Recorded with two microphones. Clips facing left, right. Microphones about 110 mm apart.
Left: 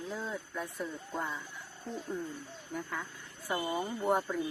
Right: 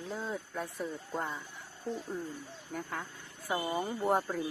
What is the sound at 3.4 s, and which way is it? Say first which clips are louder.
Speech: right 1 dB; 10° right (ahead or behind).